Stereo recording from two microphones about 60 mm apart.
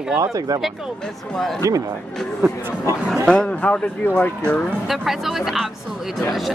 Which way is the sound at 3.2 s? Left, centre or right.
Centre.